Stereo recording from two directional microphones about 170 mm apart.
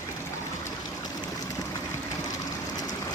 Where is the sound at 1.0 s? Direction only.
20° left (ahead or behind).